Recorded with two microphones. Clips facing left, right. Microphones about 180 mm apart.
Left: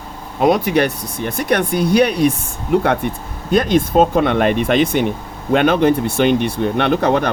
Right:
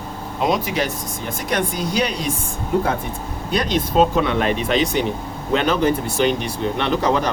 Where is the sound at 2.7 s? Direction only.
75° left (ahead or behind).